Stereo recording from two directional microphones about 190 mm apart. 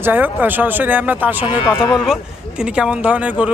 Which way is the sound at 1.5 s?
20° left (ahead or behind).